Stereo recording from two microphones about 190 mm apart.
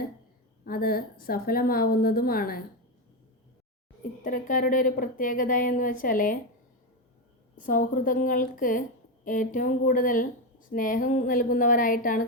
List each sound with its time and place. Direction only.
0.6 s speech: 50° left (ahead or behind)
4.2 s speech: 45° left (ahead or behind)
7.5 s speech: 45° left (ahead or behind)